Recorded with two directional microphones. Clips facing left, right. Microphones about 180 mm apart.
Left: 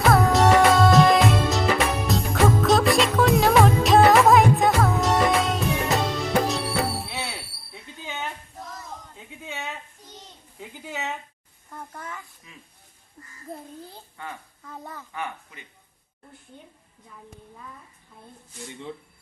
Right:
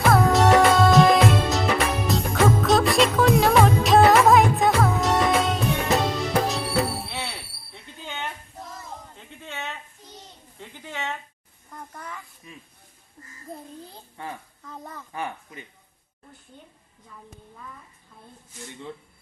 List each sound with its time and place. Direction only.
0.0 s music: centre (ahead or behind)
7.7 s a sound: 5° left (ahead or behind)
10.6 s a child's voice: 5° left (ahead or behind)
14.6 s a child's voice: 5° left (ahead or behind)
15.1 s speech: 30° right (ahead or behind)